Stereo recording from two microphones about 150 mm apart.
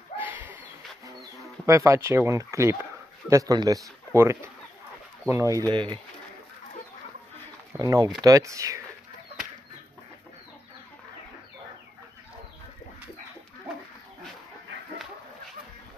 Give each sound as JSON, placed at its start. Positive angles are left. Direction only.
{"t": 0.2, "sound": "bird", "side_deg": -10}
{"t": 1.7, "sound": "speech", "side_deg": -20}
{"t": 7.8, "sound": "speech", "side_deg": -25}